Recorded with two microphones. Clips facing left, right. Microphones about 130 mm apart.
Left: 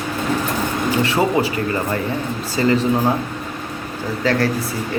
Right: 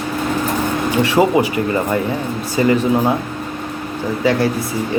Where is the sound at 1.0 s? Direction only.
15° right (ahead or behind).